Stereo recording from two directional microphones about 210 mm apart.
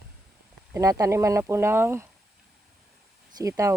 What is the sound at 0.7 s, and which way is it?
Speech, 15° right (ahead or behind).